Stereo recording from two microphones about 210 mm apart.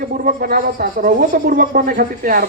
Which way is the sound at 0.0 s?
45° right (ahead or behind).